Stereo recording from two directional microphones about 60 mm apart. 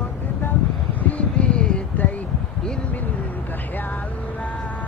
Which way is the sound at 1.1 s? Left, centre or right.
Centre.